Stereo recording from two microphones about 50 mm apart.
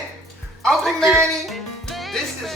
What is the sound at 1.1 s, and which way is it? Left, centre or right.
Speech, centre.